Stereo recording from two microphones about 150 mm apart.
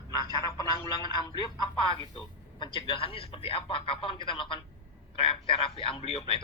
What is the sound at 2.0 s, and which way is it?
A man's voice, 35° left (ahead or behind).